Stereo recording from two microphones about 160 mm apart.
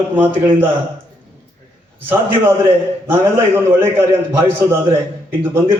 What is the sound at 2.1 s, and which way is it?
A man's voice, 15° right (ahead or behind).